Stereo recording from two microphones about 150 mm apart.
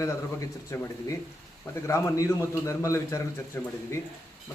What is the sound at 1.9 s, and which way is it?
A man's voice, 20° left (ahead or behind).